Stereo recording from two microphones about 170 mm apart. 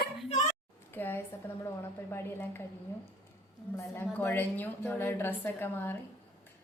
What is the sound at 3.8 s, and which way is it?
A woman's voice, 10° left (ahead or behind).